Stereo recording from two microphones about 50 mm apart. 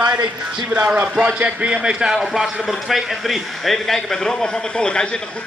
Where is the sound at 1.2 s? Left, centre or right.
Right.